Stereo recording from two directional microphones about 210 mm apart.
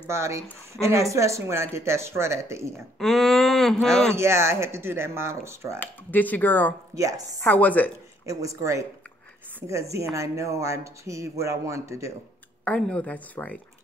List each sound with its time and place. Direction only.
0.0 s speech: 15° right (ahead or behind)
3.0 s speech: centre (ahead or behind)
4.1 s speech: 10° right (ahead or behind)
5.8 s speech: 10° left (ahead or behind)
8.3 s speech: 15° right (ahead or behind)
12.6 s speech: 5° left (ahead or behind)